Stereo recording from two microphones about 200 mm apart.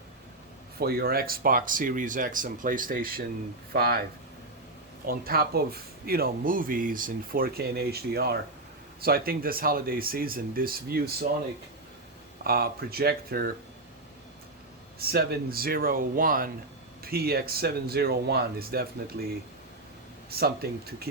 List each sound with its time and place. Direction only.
0.8 s a man's voice: 50° right (ahead or behind)
5.0 s a man's voice: 50° right (ahead or behind)
12.5 s a man's voice: 50° right (ahead or behind)
14.9 s a man's voice: 50° right (ahead or behind)
20.3 s a man's voice: 50° right (ahead or behind)